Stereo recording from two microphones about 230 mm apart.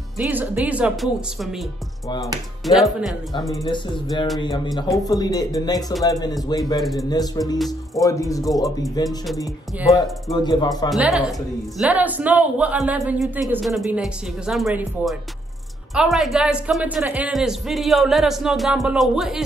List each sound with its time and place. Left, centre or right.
0.2 s speech: centre
3.5 s speech: centre
6.8 s speech: centre
7.1 s speech: centre
7.5 s speech: centre
8.0 s speech: centre
10.4 s speech: centre
10.9 s speech: centre